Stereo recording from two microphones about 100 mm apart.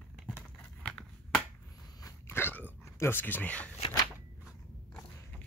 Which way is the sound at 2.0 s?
25° left (ahead or behind).